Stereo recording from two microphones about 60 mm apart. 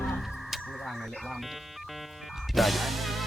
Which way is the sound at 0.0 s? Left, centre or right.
Centre.